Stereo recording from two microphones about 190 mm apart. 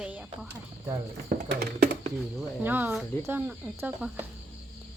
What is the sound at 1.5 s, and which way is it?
Speech, 55° right (ahead or behind).